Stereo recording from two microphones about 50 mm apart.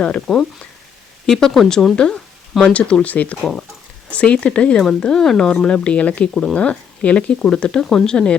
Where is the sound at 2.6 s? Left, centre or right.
Left.